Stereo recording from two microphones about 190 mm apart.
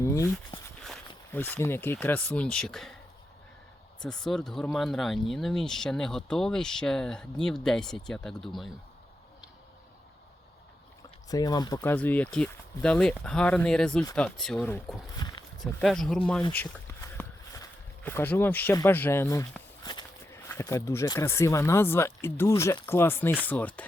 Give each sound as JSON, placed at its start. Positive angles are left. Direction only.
{"t": 0.0, "sound": "speech", "side_deg": 15}
{"t": 4.0, "sound": "speech", "side_deg": 5}
{"t": 11.3, "sound": "speech", "side_deg": 20}
{"t": 15.2, "sound": "walk", "side_deg": 20}
{"t": 15.6, "sound": "speech", "side_deg": 0}